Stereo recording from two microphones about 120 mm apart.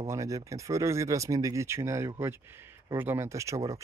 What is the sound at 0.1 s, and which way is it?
Speech, 25° right (ahead or behind).